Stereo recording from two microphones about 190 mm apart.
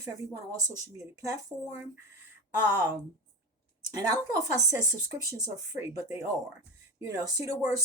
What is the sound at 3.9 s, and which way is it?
Speech, 20° right (ahead or behind).